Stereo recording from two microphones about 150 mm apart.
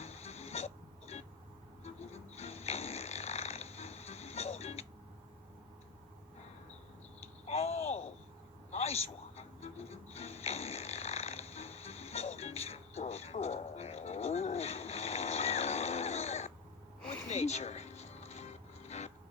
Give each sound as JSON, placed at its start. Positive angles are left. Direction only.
{"t": 0.0, "sound": "music", "side_deg": 45}
{"t": 1.8, "sound": "snoring", "side_deg": 45}
{"t": 7.4, "sound": "a sound", "side_deg": 45}
{"t": 8.7, "sound": "music", "side_deg": 45}